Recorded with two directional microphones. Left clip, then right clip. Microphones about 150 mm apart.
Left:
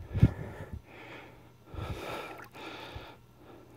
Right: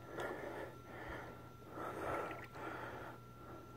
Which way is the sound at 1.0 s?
45° left (ahead or behind).